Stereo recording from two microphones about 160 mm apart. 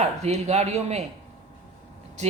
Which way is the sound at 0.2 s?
45° right (ahead or behind).